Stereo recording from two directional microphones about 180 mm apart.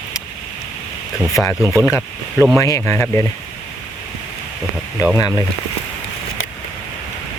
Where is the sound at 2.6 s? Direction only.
15° left (ahead or behind).